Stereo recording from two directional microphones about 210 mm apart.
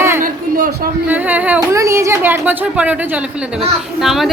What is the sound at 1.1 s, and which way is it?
A woman's voice, 10° right (ahead or behind).